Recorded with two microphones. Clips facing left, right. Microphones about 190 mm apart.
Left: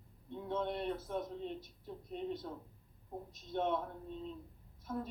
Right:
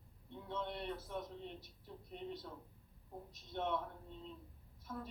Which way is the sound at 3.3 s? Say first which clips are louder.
Left 4 dB; 50° left (ahead or behind).